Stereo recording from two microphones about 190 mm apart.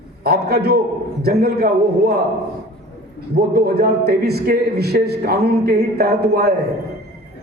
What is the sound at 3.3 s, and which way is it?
A man's voice, 55° right (ahead or behind).